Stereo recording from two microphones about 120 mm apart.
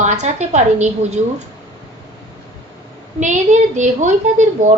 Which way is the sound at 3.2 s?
90° right.